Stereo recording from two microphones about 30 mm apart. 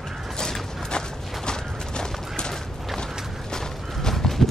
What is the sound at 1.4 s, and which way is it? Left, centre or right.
Fusillade, left.